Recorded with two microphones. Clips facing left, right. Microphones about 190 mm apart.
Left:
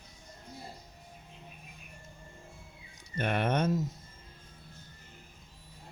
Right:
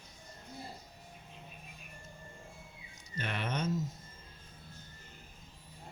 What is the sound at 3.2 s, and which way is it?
Speech, 55° left (ahead or behind).